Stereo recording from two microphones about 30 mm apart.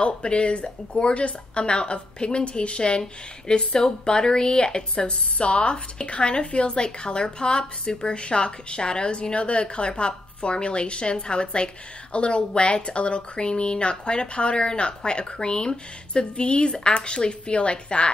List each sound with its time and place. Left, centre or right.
0.0 s speech: left